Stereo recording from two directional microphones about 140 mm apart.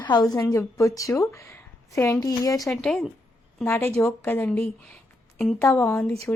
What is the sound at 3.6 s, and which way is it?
A woman's voice, 15° left (ahead or behind).